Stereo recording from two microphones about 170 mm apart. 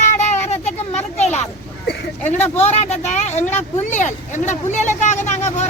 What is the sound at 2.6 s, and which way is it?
Speech, 40° left (ahead or behind).